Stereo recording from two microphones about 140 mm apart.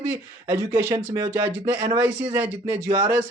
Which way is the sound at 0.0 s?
15° right (ahead or behind).